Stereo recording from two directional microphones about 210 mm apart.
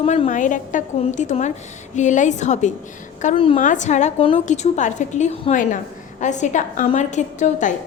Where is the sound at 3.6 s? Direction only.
35° left (ahead or behind).